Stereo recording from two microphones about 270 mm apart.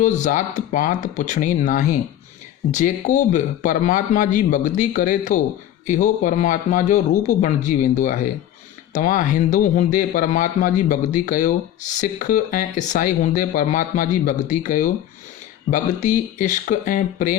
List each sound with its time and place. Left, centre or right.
0.0 s speech: left